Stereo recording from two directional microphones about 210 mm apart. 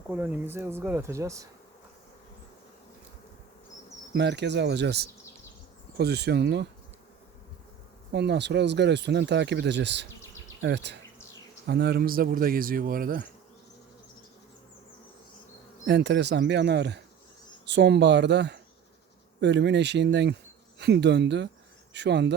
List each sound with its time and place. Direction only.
0.1 s speech: 10° right (ahead or behind)
4.1 s a man's voice: 55° right (ahead or behind)
8.1 s speech: 55° right (ahead or behind)
10.6 s bee: 55° right (ahead or behind)
11.6 s a man's voice: 50° right (ahead or behind)
15.9 s speech: 55° right (ahead or behind)